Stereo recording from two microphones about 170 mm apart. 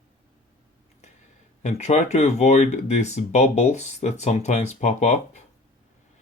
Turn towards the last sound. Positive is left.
turn(degrees=40)  # may be behind; listen again after turning